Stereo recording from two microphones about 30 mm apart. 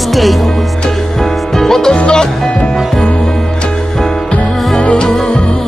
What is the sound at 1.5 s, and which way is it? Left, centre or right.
Music, centre.